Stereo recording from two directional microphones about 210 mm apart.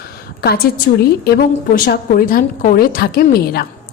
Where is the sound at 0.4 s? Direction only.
50° left (ahead or behind).